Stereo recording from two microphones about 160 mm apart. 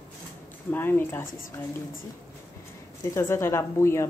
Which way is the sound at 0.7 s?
15° left (ahead or behind).